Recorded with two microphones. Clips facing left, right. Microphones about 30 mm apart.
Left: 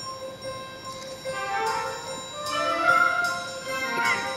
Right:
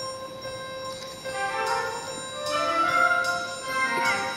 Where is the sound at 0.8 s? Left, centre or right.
Right.